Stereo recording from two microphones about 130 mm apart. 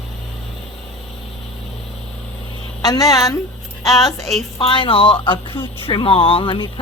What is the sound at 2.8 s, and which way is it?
Speech, 30° left (ahead or behind).